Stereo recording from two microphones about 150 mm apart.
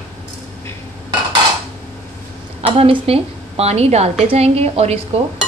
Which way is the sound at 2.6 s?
40° right (ahead or behind).